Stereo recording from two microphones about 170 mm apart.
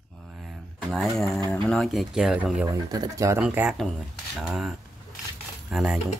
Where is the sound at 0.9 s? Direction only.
Centre (ahead or behind).